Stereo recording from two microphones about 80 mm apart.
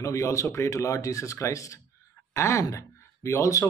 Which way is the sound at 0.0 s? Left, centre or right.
Left.